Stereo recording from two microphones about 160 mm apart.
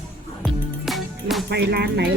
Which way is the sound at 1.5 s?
90° right.